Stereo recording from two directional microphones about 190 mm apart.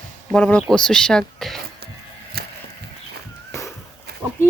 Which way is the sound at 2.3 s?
55° right (ahead or behind).